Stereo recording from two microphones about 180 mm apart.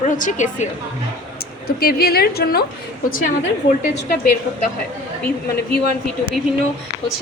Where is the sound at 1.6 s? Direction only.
60° left (ahead or behind).